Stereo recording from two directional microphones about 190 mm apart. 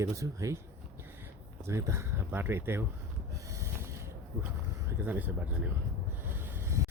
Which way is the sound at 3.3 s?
15° right (ahead or behind).